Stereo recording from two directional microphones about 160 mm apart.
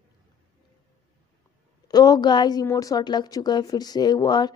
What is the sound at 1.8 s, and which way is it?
Speech, 25° left (ahead or behind).